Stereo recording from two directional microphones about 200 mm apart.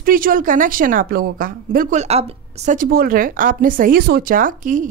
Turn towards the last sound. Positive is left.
turn(degrees=-40)  # may be behind; listen again after turning